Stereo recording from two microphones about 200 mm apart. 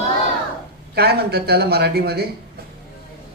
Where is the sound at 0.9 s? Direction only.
50° right (ahead or behind).